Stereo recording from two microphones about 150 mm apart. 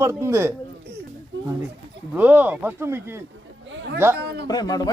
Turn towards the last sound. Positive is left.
turn(degrees=25)  # may be behind; listen again after turning